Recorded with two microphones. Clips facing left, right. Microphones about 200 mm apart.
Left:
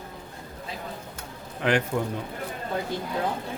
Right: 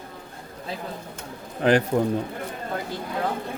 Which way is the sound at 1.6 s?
35° right (ahead or behind).